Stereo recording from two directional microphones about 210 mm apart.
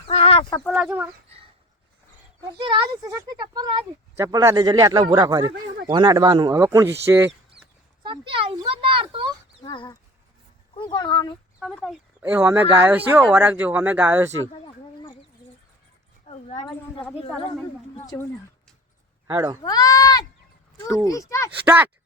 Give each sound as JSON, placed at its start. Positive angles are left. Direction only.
{"t": 0.1, "sound": "chicken", "side_deg": 25}
{"t": 0.6, "sound": "a woman's voice", "side_deg": 0}
{"t": 2.6, "sound": "speech", "side_deg": -25}
{"t": 8.0, "sound": "speech", "side_deg": -25}
{"t": 9.6, "sound": "speech", "side_deg": 20}
{"t": 11.6, "sound": "a woman's voice", "side_deg": 0}
{"t": 12.2, "sound": "speech", "side_deg": -10}
{"t": 16.2, "sound": "speech", "side_deg": 30}
{"t": 16.6, "sound": "a woman's voice", "side_deg": 0}
{"t": 18.0, "sound": "speech", "side_deg": 15}
{"t": 19.3, "sound": "speech", "side_deg": -15}
{"t": 19.6, "sound": "speech", "side_deg": 15}
{"t": 21.7, "sound": "speech", "side_deg": -10}